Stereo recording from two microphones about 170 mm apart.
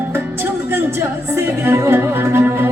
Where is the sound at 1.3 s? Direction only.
15° right (ahead or behind).